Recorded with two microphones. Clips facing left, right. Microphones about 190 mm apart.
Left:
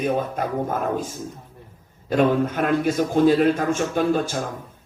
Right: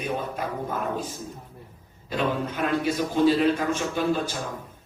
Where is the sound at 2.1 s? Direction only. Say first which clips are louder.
Left 8 dB; 50° left (ahead or behind).